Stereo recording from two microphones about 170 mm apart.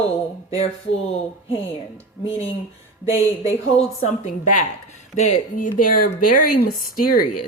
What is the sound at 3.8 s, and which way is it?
Speech, 40° left (ahead or behind).